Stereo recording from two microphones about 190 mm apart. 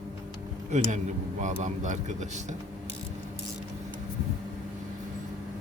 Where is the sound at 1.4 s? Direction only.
40° right (ahead or behind).